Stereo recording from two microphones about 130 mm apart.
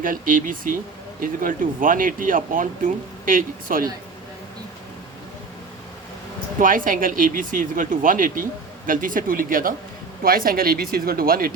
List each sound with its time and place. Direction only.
0.0 s speech: 90° right
6.6 s speech: 90° right